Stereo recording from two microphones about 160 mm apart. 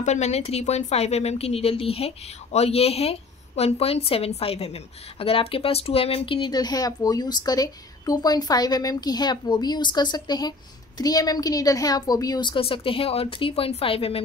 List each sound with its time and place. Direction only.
0.0 s speech: 45° left (ahead or behind)